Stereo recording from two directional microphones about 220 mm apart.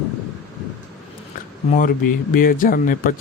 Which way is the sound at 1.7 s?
40° left (ahead or behind).